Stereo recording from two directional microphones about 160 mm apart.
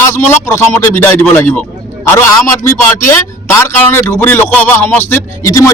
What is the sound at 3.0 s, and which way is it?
A man's voice, 15° left (ahead or behind).